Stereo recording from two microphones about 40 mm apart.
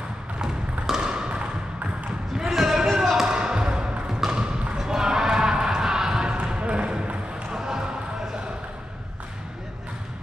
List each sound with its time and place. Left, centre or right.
0.4 s a sound: centre
2.3 s basketball bounce: centre
3.3 s music: right
4.7 s basketball bounce: centre
7.5 s basketball bounce: centre